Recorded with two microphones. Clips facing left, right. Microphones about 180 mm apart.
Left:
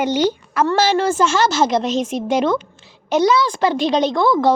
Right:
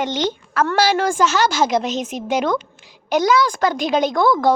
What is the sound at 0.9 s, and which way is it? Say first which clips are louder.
A woman's voice: left 1 dB; 10° right (ahead or behind).